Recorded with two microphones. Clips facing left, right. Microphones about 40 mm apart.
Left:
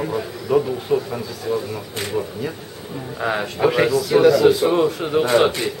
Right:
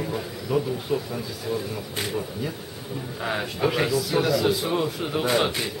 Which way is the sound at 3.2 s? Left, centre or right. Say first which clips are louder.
Left 6 dB; centre.